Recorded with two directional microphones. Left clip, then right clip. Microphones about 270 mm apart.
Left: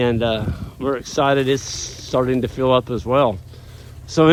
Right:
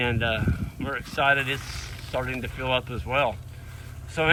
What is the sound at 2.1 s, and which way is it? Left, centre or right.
Speech, left.